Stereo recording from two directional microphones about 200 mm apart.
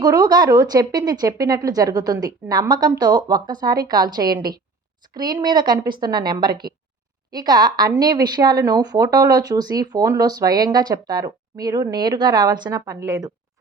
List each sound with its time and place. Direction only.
0.0 s speech: 20° right (ahead or behind)